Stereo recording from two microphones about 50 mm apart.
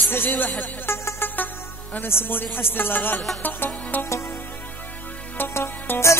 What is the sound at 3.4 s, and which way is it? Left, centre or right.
Music, left.